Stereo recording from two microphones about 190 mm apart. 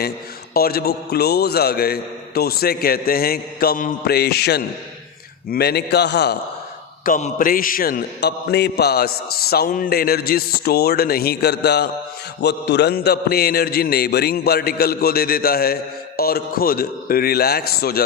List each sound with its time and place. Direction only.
0.5 s a man's voice: 50° left (ahead or behind)
7.0 s a man's voice: 45° left (ahead or behind)